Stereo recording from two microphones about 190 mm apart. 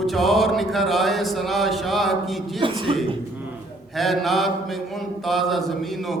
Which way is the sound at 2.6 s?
25° right (ahead or behind).